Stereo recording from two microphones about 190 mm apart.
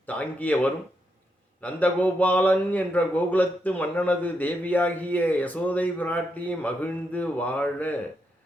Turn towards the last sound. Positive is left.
turn(degrees=10)  # may be behind; listen again after turning